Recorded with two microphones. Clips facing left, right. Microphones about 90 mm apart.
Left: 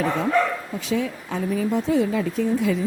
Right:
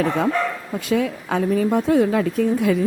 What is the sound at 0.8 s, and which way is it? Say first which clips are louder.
Speech: right 5 dB; 60° right (ahead or behind).